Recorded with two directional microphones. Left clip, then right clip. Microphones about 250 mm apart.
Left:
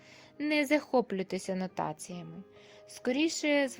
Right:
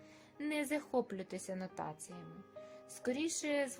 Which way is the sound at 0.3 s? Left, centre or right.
Left.